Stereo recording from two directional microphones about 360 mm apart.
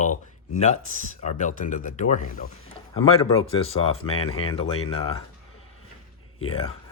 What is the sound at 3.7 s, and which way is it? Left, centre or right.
Speech, centre.